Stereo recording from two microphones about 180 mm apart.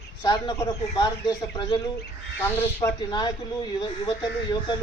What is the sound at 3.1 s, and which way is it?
A man's voice, 25° left (ahead or behind).